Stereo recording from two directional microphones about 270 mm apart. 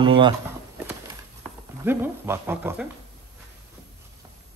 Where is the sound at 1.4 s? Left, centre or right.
Centre.